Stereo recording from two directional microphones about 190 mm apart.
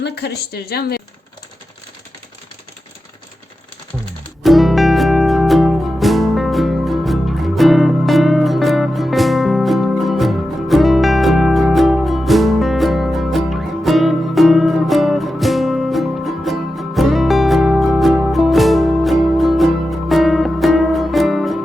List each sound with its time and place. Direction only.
0.0 s speech: 60° left (ahead or behind)
4.4 s music: centre (ahead or behind)